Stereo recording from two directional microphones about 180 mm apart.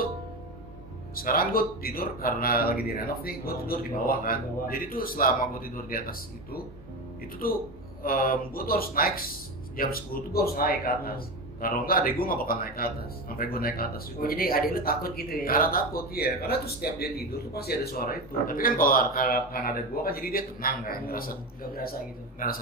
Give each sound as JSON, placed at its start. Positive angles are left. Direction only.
{"t": 1.1, "sound": "speech", "side_deg": 55}